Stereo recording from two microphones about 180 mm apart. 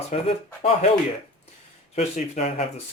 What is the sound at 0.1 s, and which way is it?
Speech, 35° left (ahead or behind).